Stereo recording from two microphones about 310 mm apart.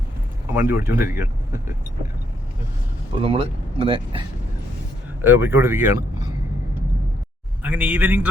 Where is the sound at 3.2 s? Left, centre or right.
Centre.